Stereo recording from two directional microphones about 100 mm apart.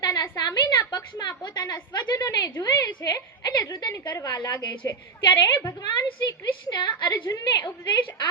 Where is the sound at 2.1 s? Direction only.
40° left (ahead or behind).